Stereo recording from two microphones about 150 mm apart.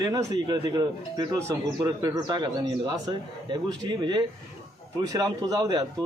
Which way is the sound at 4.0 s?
30° right (ahead or behind).